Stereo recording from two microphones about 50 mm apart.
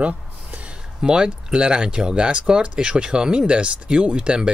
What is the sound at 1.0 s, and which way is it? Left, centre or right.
Speech, centre.